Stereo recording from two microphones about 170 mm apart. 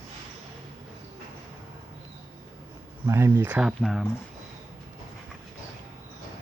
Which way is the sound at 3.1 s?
15° right (ahead or behind).